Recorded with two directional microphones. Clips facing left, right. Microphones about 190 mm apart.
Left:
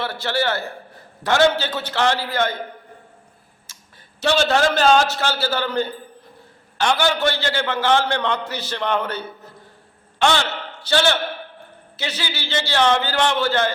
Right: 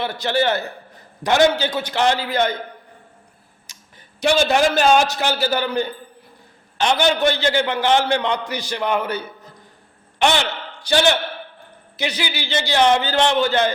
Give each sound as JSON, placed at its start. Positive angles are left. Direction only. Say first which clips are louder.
{"t": 0.0, "sound": "a man's voice", "louder": "right 3 dB", "side_deg": -15}
{"t": 3.7, "sound": "a sound", "louder": "right 1 dB", "side_deg": -15}
{"t": 4.2, "sound": "a man's voice", "louder": "right 1 dB", "side_deg": -15}